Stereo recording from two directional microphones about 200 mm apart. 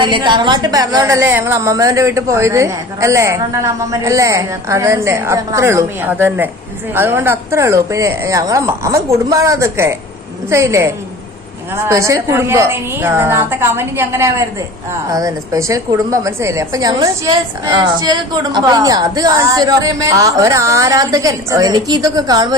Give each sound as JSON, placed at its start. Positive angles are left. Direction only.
{"t": 0.0, "sound": "a woman's voice", "side_deg": -25}